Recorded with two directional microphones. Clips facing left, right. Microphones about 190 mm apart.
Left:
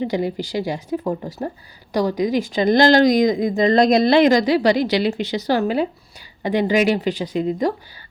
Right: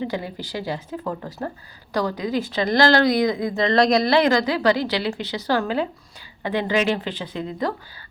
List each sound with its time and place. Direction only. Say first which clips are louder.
0.0 s speech: left 6 dB; 15° left (ahead or behind)